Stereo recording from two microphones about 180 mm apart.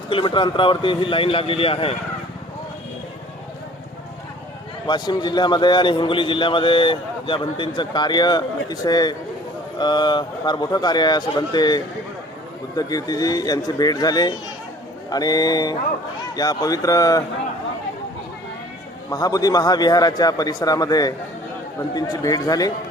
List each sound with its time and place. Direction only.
0.1 s a man's voice: 30° left (ahead or behind)
4.9 s a man's voice: 25° left (ahead or behind)
19.1 s a man's voice: 20° left (ahead or behind)